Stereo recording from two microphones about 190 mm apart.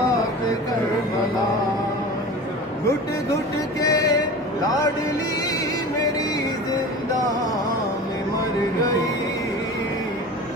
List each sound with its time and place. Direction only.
3.8 s music: 20° left (ahead or behind)